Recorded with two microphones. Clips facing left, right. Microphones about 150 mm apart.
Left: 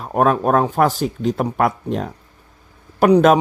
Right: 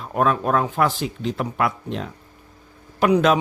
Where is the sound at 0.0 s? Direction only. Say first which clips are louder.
Left 4 dB; 45° left (ahead or behind).